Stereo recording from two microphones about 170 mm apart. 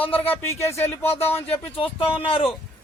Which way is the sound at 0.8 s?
15° left (ahead or behind).